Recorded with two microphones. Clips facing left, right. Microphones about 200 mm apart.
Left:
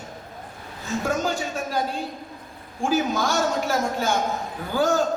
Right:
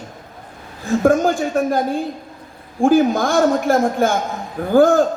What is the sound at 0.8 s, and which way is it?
Speech, 55° right (ahead or behind).